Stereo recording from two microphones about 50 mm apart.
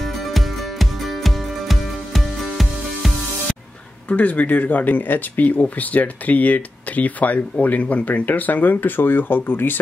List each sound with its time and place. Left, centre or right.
0.0 s music: centre
4.1 s speech: left